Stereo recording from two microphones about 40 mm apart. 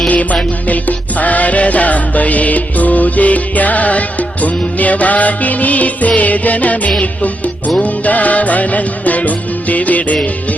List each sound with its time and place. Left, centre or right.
0.1 s music: left